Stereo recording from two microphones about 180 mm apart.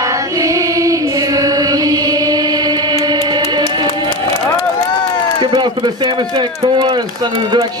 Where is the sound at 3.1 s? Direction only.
25° right (ahead or behind).